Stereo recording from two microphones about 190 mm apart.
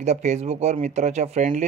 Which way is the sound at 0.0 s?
35° right (ahead or behind).